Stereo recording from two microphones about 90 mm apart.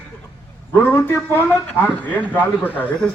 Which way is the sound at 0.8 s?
20° left (ahead or behind).